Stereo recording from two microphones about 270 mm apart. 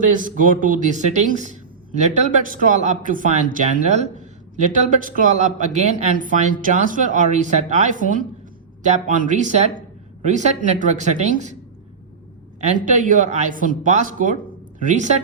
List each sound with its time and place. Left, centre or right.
0.0 s a man's voice: right
12.8 s a man's voice: right